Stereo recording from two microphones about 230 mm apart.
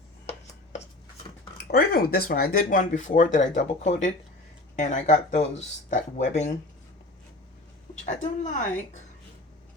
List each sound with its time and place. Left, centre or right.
1.7 s speech: left
8.0 s speech: left